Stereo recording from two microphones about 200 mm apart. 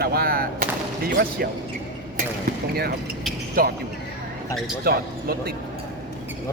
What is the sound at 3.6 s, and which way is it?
Speech, 45° right (ahead or behind).